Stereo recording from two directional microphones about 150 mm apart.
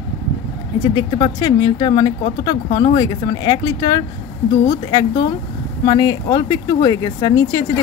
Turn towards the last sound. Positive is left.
turn(degrees=25)  # may be behind; listen again after turning